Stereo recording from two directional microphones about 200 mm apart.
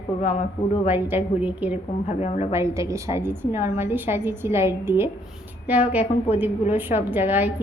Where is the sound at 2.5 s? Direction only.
15° right (ahead or behind).